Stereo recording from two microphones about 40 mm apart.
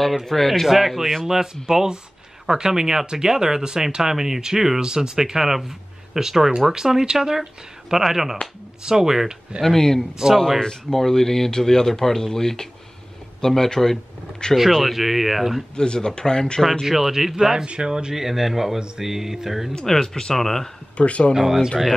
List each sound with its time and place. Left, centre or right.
0.0 s speech: centre
1.2 s speech: centre
9.6 s speech: centre
10.6 s speech: centre
15.7 s speech: left
16.8 s speech: centre
18.1 s speech: centre
19.9 s speech: centre
21.3 s speech: centre